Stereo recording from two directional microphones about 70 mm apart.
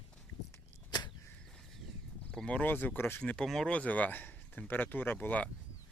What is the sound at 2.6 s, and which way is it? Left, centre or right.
Speech, left.